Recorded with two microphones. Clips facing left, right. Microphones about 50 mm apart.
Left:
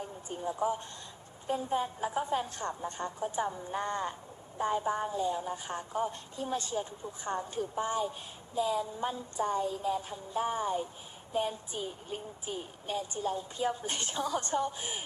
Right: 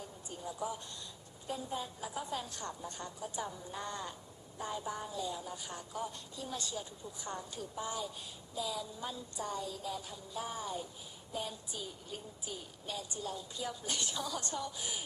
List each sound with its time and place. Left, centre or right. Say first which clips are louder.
0.0 s a woman's voice: left 8 dB; left